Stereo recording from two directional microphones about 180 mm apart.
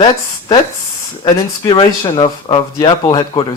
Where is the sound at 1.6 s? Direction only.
30° left (ahead or behind).